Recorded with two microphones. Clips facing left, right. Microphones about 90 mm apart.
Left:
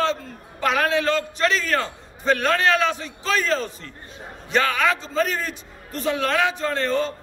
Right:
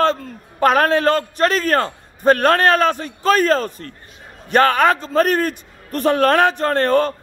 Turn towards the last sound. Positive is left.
turn(degrees=-55)  # may be behind; listen again after turning